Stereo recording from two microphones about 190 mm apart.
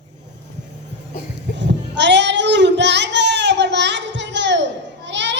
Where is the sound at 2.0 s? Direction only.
65° right (ahead or behind).